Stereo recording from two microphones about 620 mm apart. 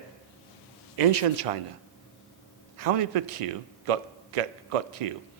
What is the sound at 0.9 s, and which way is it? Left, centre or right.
Speech, right.